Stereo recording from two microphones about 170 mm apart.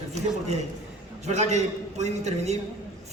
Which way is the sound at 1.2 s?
40° right (ahead or behind).